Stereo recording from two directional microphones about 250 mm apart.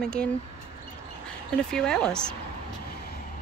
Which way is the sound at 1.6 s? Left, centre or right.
Centre.